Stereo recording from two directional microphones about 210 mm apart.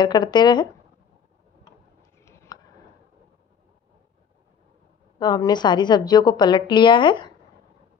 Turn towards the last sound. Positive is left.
turn(degrees=20)  # may be behind; listen again after turning